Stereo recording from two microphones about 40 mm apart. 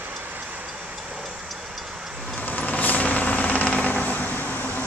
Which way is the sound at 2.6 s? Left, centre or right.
Left.